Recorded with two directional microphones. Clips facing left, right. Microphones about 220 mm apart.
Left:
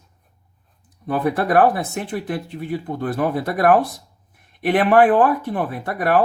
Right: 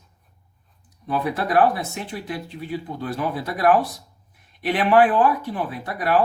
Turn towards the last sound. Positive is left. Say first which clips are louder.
# left 3 dB
turn(degrees=50)  # may be behind; listen again after turning